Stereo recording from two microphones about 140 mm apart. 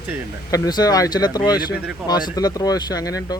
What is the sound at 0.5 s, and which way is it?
Speech, 25° left (ahead or behind).